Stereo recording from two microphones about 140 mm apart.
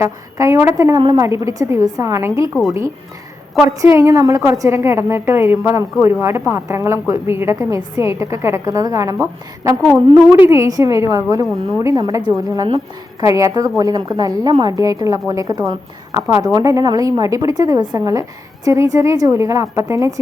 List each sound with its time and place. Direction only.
0.0 s a woman's voice: 20° right (ahead or behind)
3.6 s a woman's voice: 20° right (ahead or behind)
10.5 s a woman's voice: 25° right (ahead or behind)
12.6 s a woman's voice: 35° right (ahead or behind)
13.2 s a woman's voice: 20° right (ahead or behind)